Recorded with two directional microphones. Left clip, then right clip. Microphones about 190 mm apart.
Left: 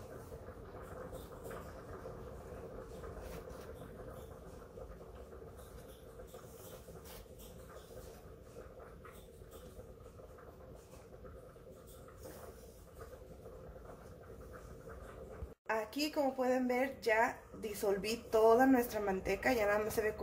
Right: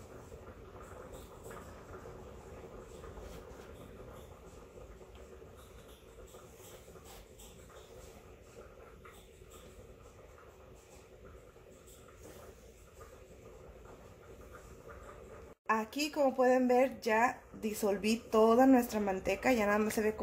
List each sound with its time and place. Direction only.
15.6 s speech: 45° right (ahead or behind)